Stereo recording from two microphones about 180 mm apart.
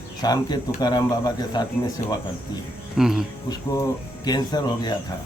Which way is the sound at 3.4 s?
20° left (ahead or behind).